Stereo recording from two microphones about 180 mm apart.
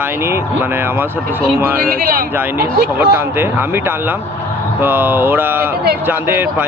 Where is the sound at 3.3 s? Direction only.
10° right (ahead or behind).